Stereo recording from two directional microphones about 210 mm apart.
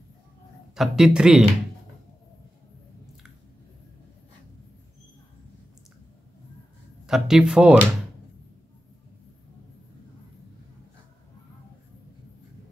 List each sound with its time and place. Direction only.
0.7 s speech: centre (ahead or behind)
7.1 s speech: centre (ahead or behind)